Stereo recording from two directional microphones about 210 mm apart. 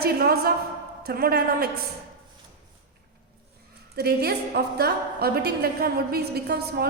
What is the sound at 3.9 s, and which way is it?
A woman's voice, 50° right (ahead or behind).